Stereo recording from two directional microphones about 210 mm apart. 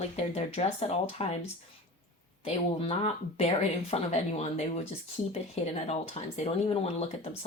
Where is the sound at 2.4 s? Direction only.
30° left (ahead or behind).